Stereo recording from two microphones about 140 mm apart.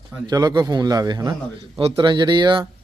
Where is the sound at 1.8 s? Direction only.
40° right (ahead or behind).